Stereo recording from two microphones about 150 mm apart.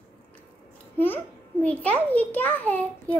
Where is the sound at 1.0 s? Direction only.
15° left (ahead or behind).